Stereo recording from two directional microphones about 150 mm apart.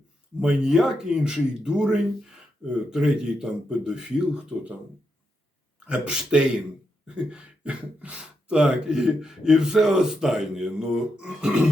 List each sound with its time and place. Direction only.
0.3 s speech: 5° right (ahead or behind)
5.9 s speech: 5° right (ahead or behind)